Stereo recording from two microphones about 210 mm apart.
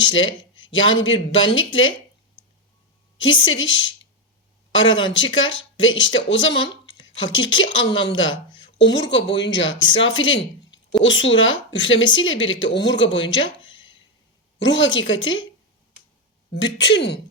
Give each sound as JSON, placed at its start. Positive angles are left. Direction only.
{"t": 0.0, "sound": "a sound", "side_deg": 65}
{"t": 0.5, "sound": "a man's voice", "side_deg": 65}
{"t": 3.2, "sound": "speech", "side_deg": 65}
{"t": 14.6, "sound": "speech", "side_deg": 60}
{"t": 16.6, "sound": "speech", "side_deg": 60}